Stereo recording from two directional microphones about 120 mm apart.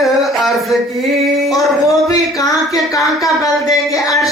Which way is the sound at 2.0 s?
30° left (ahead or behind).